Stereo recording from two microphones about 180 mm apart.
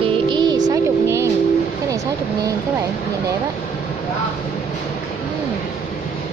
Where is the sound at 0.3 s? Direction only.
25° right (ahead or behind).